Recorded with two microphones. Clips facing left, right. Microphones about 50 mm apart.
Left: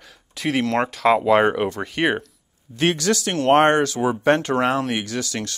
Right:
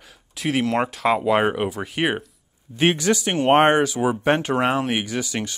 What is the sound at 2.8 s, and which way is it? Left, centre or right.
Speech, centre.